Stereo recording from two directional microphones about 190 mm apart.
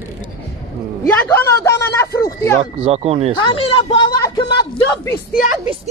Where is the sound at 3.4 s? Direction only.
25° left (ahead or behind).